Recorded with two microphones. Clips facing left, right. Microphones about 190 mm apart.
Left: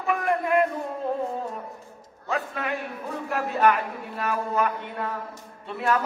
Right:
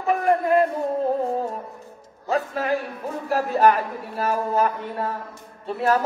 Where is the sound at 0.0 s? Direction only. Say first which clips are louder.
Right 5 dB; 30° right (ahead or behind).